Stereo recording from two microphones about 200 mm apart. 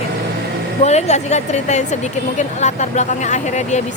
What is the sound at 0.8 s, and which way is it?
Speech, 35° left (ahead or behind).